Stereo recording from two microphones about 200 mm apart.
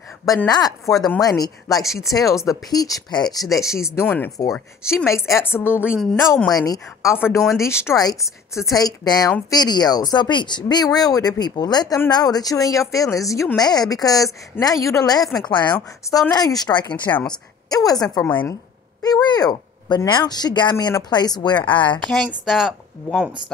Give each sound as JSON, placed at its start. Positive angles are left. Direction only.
{"t": 0.5, "sound": "speech", "side_deg": 20}
{"t": 0.9, "sound": "speech", "side_deg": 0}
{"t": 1.2, "sound": "speech", "side_deg": 20}
{"t": 7.2, "sound": "speech", "side_deg": 0}
{"t": 7.6, "sound": "speech", "side_deg": 15}
{"t": 16.9, "sound": "a woman's voice", "side_deg": 10}
{"t": 22.0, "sound": "speech", "side_deg": 5}